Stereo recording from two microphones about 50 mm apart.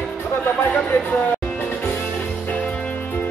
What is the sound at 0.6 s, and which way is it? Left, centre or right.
Music, left.